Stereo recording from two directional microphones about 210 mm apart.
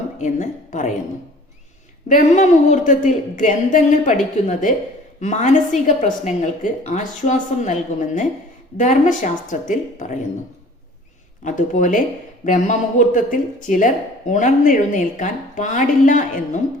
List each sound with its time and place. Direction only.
0.2 s a woman's voice: 35° left (ahead or behind)
2.0 s speech: 35° left (ahead or behind)
11.4 s speech: 35° left (ahead or behind)